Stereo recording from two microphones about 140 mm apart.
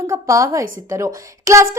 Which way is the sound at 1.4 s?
20° right (ahead or behind).